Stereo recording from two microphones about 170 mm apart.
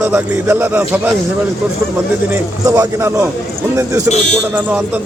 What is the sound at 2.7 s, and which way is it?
Speech, 15° right (ahead or behind).